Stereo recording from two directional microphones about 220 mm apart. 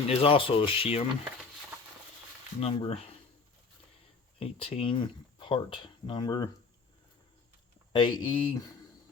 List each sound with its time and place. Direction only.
0.1 s speech: 25° left (ahead or behind)
2.6 s speech: 25° left (ahead or behind)
4.4 s speech: 25° left (ahead or behind)
7.9 s speech: 20° left (ahead or behind)